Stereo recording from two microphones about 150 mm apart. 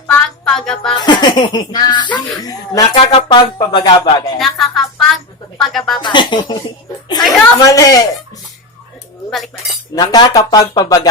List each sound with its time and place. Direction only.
0.1 s speech: 5° left (ahead or behind)
0.9 s speech: 30° left (ahead or behind)
4.4 s speech: centre (ahead or behind)
6.0 s speech: 30° left (ahead or behind)
9.9 s speech: 25° left (ahead or behind)